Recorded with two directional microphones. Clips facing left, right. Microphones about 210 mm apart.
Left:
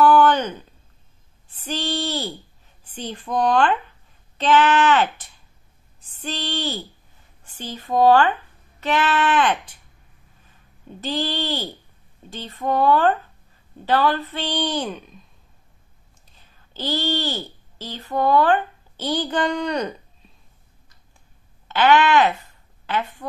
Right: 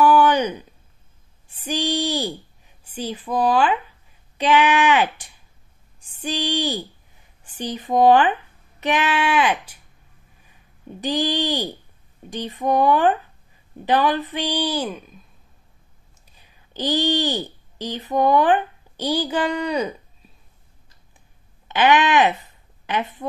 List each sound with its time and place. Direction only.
0.0 s a sound: 10° right (ahead or behind)
1.6 s a woman's voice: 15° right (ahead or behind)
5.9 s a sound: 10° right (ahead or behind)
7.4 s speech: 15° right (ahead or behind)
11.0 s a woman's voice: 15° right (ahead or behind)
16.3 s speech: 10° right (ahead or behind)
21.6 s a woman's voice: 15° right (ahead or behind)